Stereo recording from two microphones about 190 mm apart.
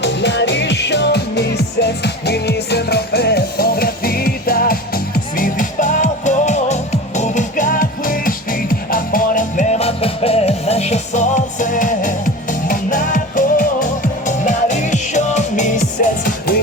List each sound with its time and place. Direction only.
0.0 s music: 65° left (ahead or behind); by 15.7 s 40° left (ahead or behind)